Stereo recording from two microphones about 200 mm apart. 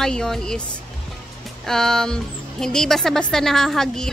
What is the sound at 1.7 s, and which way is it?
Speech, centre (ahead or behind).